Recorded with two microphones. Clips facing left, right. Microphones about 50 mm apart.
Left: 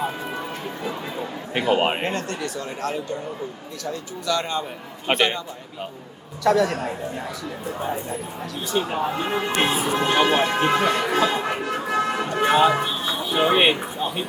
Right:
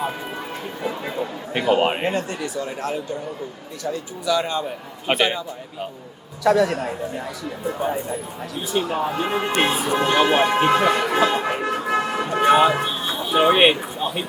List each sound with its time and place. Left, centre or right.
0.8 s speech: centre
1.1 s a man's voice: centre
2.0 s a man's voice: centre
6.4 s a man's voice: centre
7.8 s a man's voice: centre
10.3 s speech: centre
11.7 s music: centre
13.3 s speech: centre